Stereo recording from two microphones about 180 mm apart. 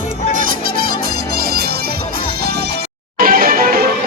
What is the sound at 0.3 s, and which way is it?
Music, 55° right (ahead or behind).